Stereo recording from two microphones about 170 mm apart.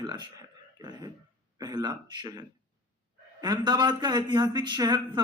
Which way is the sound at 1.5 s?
20° right (ahead or behind).